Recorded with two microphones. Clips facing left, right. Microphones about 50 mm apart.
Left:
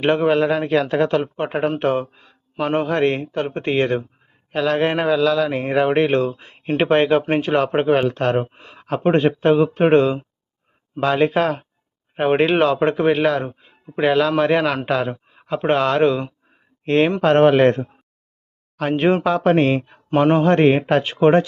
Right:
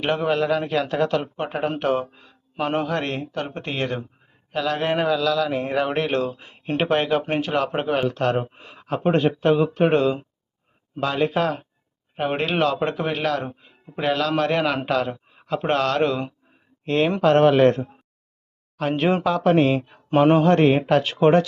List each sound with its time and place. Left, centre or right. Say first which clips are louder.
0.0 s speech: left 5 dB; left
5.5 s speech: left 2 dB; centre
5.7 s speech: left 8 dB; left
7.2 s speech: left 4 dB; centre
7.4 s speech: left 6 dB; left
8.5 s speech: left 1 dB; centre
9.0 s speech: left 3 dB; left
12.4 s speech: left 4 dB; centre
16.8 s speech: left 3 dB; left
19.7 s speech: left 1 dB; centre
20.4 s speech: left 2 dB; left